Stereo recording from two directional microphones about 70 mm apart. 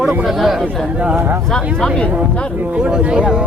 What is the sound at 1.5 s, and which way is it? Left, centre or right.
Speech, centre.